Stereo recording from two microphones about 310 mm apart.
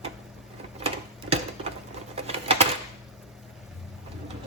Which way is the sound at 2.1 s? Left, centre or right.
Centre.